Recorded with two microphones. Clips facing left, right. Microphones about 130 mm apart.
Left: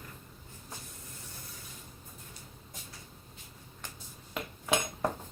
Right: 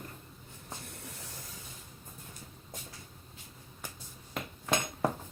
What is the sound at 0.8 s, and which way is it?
Spray, 70° right (ahead or behind).